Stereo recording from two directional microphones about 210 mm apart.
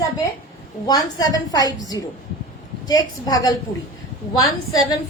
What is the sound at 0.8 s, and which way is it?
A woman's voice, 20° left (ahead or behind).